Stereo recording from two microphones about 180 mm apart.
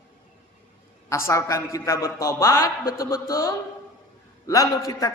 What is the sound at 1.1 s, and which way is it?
A man's voice, 15° left (ahead or behind).